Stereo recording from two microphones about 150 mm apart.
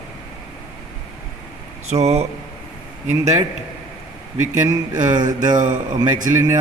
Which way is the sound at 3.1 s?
20° right (ahead or behind).